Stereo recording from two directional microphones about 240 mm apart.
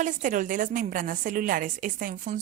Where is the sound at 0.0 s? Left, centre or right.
Right.